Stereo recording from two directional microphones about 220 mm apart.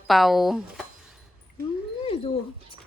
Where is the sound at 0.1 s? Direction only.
Centre (ahead or behind).